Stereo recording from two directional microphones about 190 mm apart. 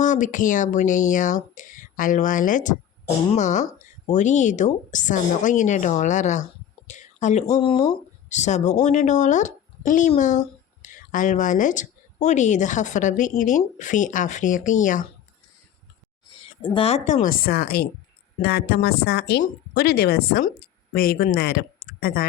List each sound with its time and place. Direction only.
0.0 s a woman's voice: 40° left (ahead or behind)
6.8 s a sound: 40° left (ahead or behind)
7.5 s a woman's voice: 30° left (ahead or behind)
16.4 s a woman's voice: 25° left (ahead or behind); by 22.3 s 50° left (ahead or behind)